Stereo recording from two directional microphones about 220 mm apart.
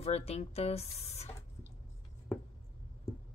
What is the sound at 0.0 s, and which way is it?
Speech, 30° left (ahead or behind).